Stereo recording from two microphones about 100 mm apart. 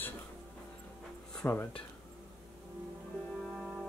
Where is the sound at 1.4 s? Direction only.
20° left (ahead or behind).